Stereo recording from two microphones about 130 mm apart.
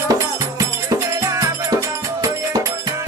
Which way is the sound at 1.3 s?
25° right (ahead or behind).